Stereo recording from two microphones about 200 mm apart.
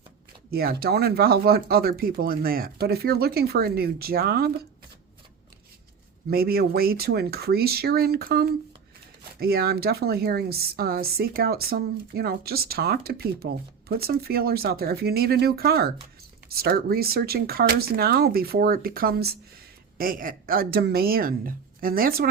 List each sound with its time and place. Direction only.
0.5 s a woman's voice: 50° right (ahead or behind)
6.3 s a woman's voice: 50° right (ahead or behind)